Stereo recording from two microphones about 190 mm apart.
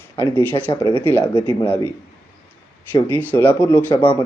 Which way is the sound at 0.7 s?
25° left (ahead or behind).